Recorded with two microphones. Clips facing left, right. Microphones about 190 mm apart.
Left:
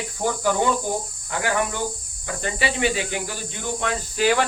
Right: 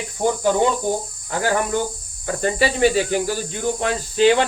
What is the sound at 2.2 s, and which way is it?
Speech, 40° right (ahead or behind).